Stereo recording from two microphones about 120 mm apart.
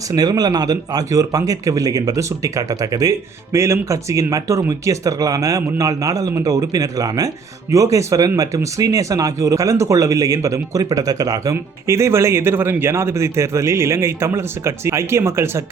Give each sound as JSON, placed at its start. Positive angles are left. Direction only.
{"t": 0.1, "sound": "speech", "side_deg": -35}